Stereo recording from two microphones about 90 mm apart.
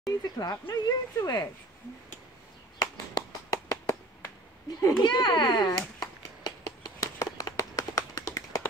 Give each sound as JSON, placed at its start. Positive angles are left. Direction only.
{"t": 0.0, "sound": "a child's voice", "side_deg": 40}
{"t": 2.8, "sound": "a sound", "side_deg": 40}
{"t": 4.8, "sound": "a child's voice", "side_deg": 50}
{"t": 7.0, "sound": "tap", "side_deg": 40}